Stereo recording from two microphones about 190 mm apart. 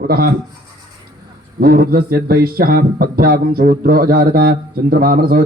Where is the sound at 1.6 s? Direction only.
55° right (ahead or behind).